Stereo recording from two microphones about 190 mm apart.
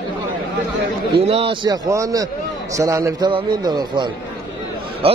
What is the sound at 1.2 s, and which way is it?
Speech, 30° right (ahead or behind).